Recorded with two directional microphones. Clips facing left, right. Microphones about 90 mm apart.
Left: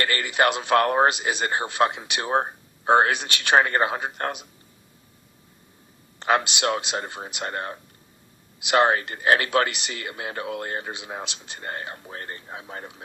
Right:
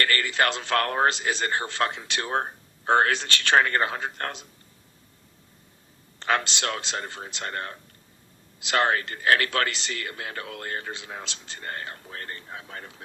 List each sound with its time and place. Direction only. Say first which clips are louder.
0.0 s speech: left 2 dB; 20° left (ahead or behind)
6.1 s speech: left 3 dB; 15° left (ahead or behind)